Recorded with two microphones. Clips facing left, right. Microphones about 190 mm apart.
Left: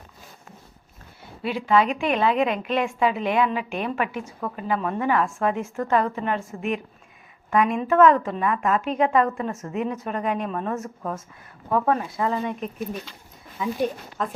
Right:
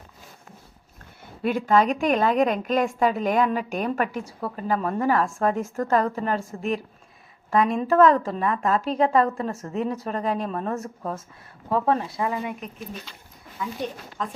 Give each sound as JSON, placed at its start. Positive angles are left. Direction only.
{"t": 1.4, "sound": "a woman's voice", "side_deg": -50}
{"t": 12.2, "sound": "speech", "side_deg": -10}
{"t": 14.2, "sound": "speech", "side_deg": 5}